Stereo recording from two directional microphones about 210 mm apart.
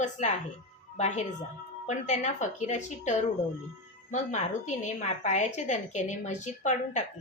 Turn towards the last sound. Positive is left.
turn(degrees=35)  # may be behind; listen again after turning